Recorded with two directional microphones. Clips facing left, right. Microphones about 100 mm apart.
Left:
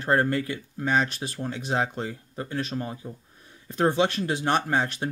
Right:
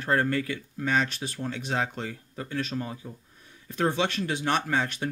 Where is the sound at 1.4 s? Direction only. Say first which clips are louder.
Left 2 dB; 15° left (ahead or behind); by 3.0 s 30° left (ahead or behind).